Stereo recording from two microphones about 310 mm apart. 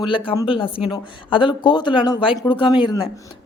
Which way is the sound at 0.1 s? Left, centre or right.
Centre.